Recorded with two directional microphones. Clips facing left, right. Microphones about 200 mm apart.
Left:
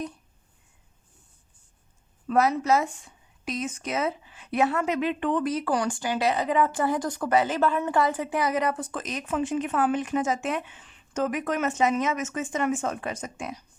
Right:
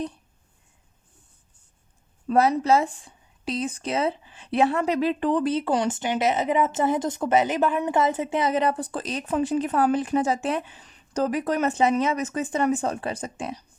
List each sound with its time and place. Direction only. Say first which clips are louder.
2.2 s a woman's voice: right 2 dB; 30° right (ahead or behind)